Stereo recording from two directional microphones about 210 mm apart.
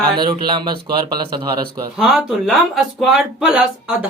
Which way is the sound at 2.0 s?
Centre (ahead or behind).